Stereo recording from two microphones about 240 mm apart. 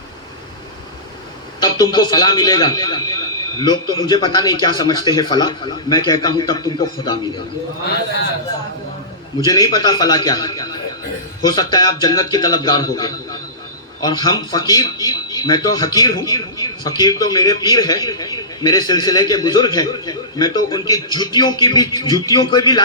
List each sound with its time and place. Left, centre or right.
1.6 s a man's voice: centre
9.4 s speech: centre